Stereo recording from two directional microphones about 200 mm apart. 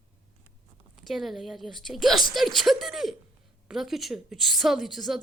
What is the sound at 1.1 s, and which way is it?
A woman's voice, centre (ahead or behind).